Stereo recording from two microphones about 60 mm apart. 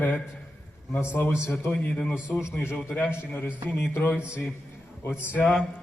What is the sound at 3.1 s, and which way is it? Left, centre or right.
A man's voice, left.